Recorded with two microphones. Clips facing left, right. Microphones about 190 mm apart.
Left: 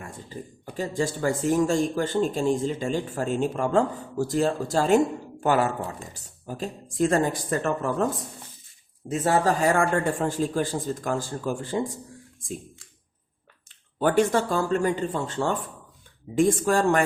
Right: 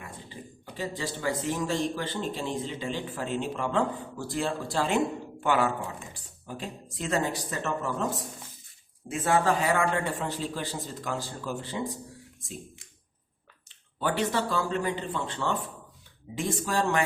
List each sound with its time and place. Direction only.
0.0 s speech: 45° left (ahead or behind)
9.0 s speech: 40° left (ahead or behind)
14.0 s speech: 50° left (ahead or behind)